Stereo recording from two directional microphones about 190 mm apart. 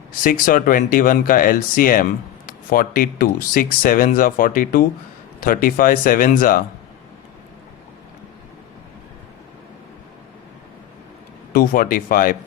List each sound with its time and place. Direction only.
0.2 s speech: 45° left (ahead or behind)
11.5 s speech: 45° left (ahead or behind)